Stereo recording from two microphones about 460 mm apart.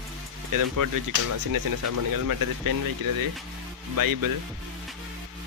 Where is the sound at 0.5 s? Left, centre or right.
Right.